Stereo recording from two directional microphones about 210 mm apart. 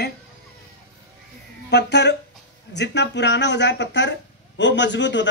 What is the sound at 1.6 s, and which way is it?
Speech, 55° left (ahead or behind).